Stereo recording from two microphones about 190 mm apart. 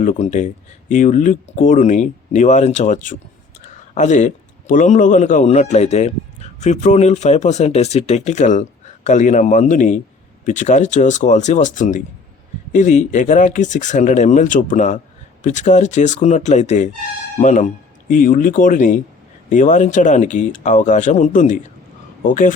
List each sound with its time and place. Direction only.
0.0 s speech: 40° left (ahead or behind)
3.6 s a sound: 40° left (ahead or behind)
4.7 s speech: 45° left (ahead or behind)